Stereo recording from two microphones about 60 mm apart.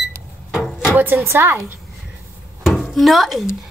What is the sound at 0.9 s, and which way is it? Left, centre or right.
Speech, right.